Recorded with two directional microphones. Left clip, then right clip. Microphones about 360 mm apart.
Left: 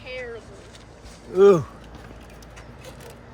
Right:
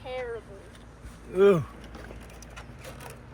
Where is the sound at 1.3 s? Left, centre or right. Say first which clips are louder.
Left 6 dB; centre.